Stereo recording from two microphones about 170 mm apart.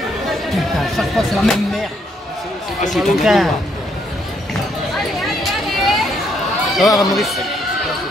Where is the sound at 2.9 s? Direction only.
Centre (ahead or behind).